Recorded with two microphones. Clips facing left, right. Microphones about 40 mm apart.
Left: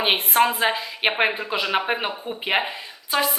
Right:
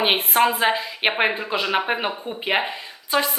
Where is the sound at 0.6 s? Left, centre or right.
Centre.